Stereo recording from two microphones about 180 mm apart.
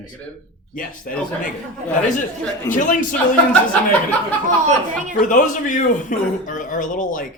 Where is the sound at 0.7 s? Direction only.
50° left (ahead or behind).